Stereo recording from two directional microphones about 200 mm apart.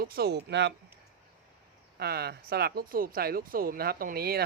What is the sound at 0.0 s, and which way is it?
Speech, 50° right (ahead or behind).